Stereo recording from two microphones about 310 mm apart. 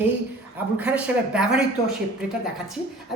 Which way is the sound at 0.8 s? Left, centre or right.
Centre.